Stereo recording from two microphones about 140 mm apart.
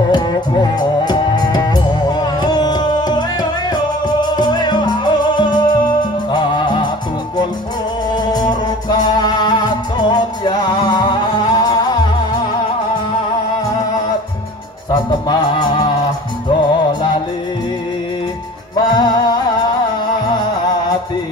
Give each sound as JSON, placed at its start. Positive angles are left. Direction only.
{"t": 0.1, "sound": "music", "side_deg": 30}
{"t": 8.1, "sound": "music", "side_deg": 30}
{"t": 15.0, "sound": "music", "side_deg": 30}
{"t": 18.8, "sound": "music", "side_deg": 30}